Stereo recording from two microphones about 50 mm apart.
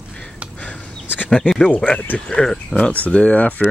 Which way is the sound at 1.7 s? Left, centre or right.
Left.